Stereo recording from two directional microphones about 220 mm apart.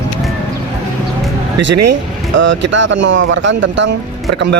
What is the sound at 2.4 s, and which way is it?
Speech, 55° right (ahead or behind).